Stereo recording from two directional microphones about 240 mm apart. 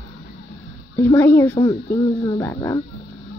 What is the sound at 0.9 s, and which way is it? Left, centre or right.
Speech, centre.